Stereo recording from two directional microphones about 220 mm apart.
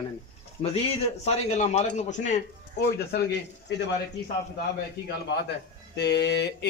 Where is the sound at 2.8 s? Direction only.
45° left (ahead or behind).